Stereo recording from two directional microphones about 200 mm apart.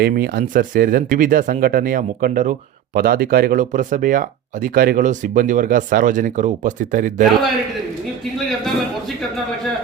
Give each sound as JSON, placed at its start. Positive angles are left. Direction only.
{"t": 0.0, "sound": "speech", "side_deg": -45}